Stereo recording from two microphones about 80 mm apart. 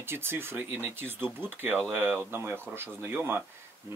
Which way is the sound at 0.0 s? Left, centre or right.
Right.